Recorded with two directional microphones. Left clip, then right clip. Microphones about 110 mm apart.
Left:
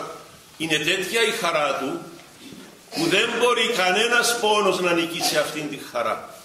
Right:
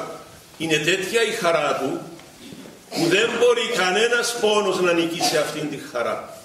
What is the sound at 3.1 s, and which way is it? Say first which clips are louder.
A man's voice: right 2 dB; 20° left (ahead or behind).